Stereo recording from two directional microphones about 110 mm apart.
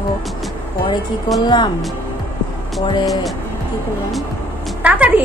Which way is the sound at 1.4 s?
40° left (ahead or behind).